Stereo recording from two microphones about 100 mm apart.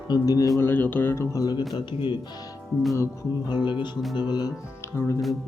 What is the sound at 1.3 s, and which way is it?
Speech, 40° left (ahead or behind).